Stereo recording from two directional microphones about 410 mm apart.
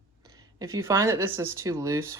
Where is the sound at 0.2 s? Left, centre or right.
Centre.